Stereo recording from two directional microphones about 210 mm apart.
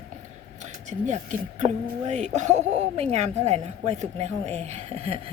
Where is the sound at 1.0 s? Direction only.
35° right (ahead or behind).